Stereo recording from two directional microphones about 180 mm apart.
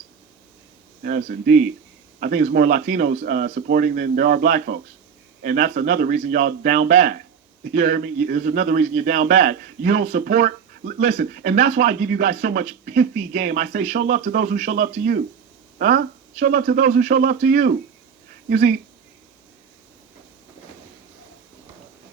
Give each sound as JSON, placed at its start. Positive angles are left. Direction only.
{"t": 1.0, "sound": "speech", "side_deg": -55}
{"t": 16.4, "sound": "speech", "side_deg": -60}
{"t": 17.1, "sound": "speech", "side_deg": -60}